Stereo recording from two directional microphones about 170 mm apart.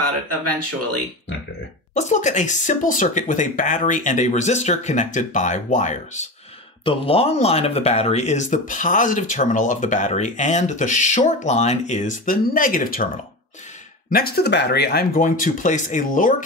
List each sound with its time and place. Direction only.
2.0 s speech: 45° left (ahead or behind)
6.8 s speech: 30° left (ahead or behind); by 13.1 s 55° left (ahead or behind)
14.1 s speech: 65° left (ahead or behind)